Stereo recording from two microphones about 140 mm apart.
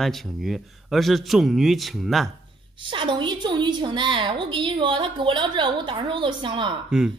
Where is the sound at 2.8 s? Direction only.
35° right (ahead or behind).